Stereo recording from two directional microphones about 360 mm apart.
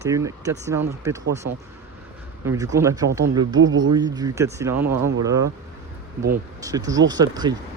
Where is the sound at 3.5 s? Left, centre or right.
Right.